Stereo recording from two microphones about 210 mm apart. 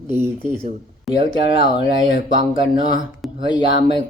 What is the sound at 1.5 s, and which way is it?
Speech, 60° left (ahead or behind).